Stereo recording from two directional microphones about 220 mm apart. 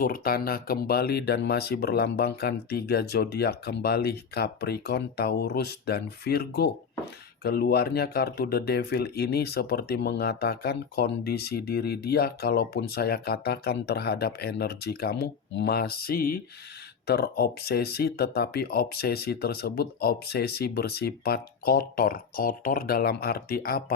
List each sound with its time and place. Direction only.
0.0 s speech: 40° left (ahead or behind)